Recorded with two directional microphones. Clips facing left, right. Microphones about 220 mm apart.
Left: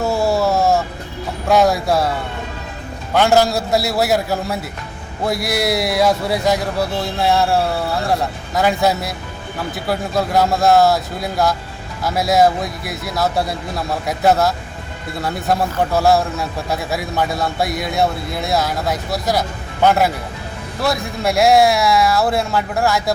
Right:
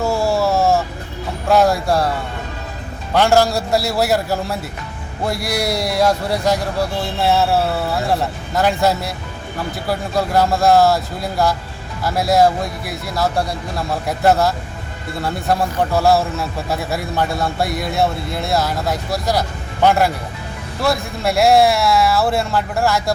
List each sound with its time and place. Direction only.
0.0 s music: centre (ahead or behind)
1.5 s a man's voice: centre (ahead or behind)
3.2 s a man's voice: centre (ahead or behind)